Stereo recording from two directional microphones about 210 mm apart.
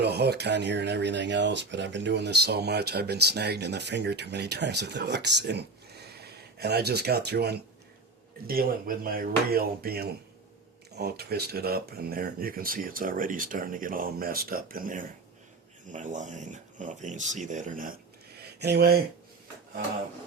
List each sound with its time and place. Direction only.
0.0 s speech: 50° right (ahead or behind)
18.6 s speech: 50° right (ahead or behind)